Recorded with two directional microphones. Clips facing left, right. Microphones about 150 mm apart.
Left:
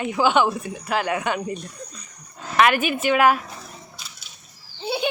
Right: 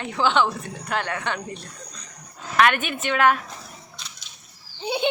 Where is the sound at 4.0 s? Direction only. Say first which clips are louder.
Even; 5° left (ahead or behind).